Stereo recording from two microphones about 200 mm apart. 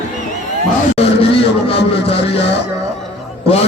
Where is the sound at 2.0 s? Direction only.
30° left (ahead or behind).